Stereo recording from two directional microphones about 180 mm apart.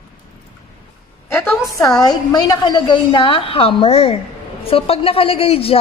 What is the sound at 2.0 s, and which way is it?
A woman's voice, 20° left (ahead or behind).